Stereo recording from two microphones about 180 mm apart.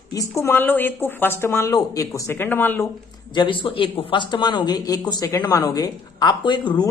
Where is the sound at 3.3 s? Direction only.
30° left (ahead or behind).